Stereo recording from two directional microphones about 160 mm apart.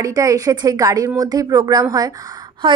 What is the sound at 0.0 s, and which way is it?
Speech, 20° right (ahead or behind).